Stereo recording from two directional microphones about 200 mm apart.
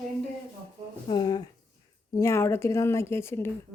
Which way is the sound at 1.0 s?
20° left (ahead or behind).